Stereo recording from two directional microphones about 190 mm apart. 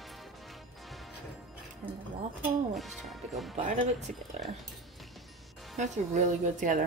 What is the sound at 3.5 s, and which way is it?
Speech, 40° right (ahead or behind).